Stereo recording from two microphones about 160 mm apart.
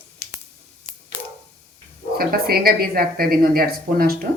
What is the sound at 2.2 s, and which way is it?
A woman's voice, 70° right (ahead or behind).